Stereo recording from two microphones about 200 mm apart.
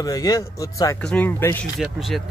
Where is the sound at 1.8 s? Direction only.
Centre (ahead or behind).